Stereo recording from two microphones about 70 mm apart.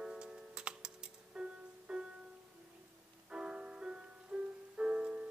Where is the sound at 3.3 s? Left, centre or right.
Centre.